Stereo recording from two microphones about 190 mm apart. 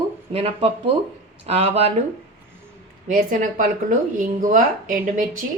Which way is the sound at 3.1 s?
45° right (ahead or behind).